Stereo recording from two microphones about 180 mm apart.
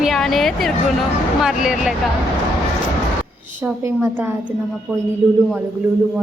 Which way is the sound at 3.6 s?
15° right (ahead or behind).